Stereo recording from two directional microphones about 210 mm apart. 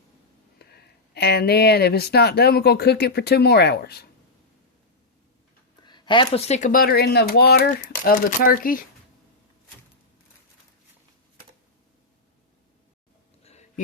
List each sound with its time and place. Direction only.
0.6 s speech: 50° left (ahead or behind)
5.8 s speech: 20° left (ahead or behind); by 8.8 s 40° left (ahead or behind)
13.4 s a sound: 30° left (ahead or behind)